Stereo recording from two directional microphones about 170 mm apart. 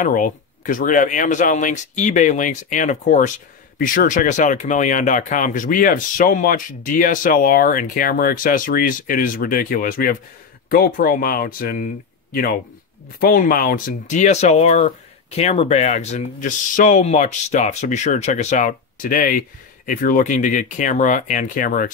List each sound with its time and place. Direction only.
0.0 s speech: 50° left (ahead or behind)